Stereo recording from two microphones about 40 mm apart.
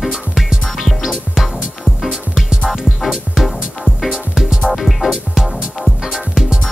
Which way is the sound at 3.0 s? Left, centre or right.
Centre.